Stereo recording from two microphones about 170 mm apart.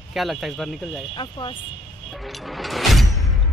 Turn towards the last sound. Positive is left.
turn(degrees=0)  # may be behind; listen again after turning